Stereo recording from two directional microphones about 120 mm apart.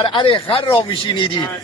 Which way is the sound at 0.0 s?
45° left (ahead or behind).